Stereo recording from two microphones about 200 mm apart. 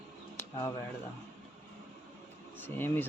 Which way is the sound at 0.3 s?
15° left (ahead or behind).